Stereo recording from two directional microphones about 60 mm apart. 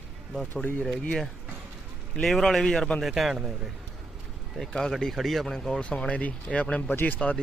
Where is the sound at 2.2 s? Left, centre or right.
Centre.